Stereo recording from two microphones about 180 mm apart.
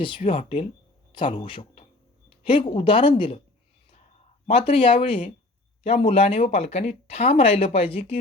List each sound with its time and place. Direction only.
0.0 s speech: 30° left (ahead or behind)
4.4 s speech: 30° left (ahead or behind)